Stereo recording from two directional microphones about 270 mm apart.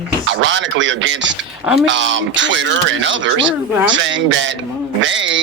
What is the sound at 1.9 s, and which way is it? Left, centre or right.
Speech, right.